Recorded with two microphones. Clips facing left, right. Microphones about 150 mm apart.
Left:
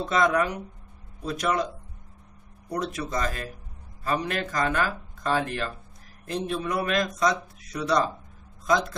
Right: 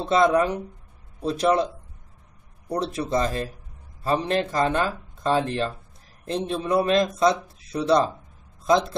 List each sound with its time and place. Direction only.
0.0 s speech: 30° right (ahead or behind)
2.7 s speech: 30° right (ahead or behind)